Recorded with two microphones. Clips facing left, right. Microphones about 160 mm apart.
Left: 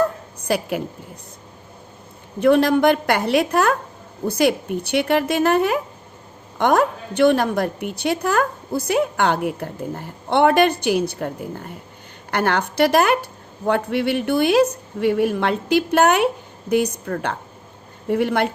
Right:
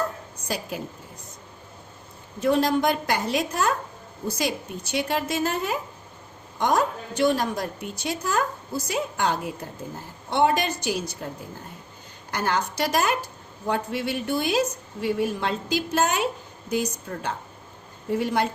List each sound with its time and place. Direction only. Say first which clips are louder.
0.4 s a woman's voice: left 9 dB; 65° left (ahead or behind)
2.4 s a woman's voice: left 6 dB; 65° left (ahead or behind)
12.3 s a woman's voice: left 5 dB; 65° left (ahead or behind)